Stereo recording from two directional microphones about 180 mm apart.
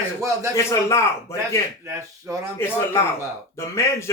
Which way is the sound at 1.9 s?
15° right (ahead or behind).